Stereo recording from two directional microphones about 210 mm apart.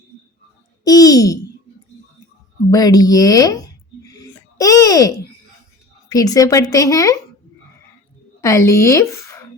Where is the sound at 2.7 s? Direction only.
15° left (ahead or behind).